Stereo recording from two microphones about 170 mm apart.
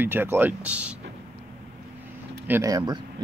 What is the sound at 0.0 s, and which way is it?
Speech, 10° right (ahead or behind).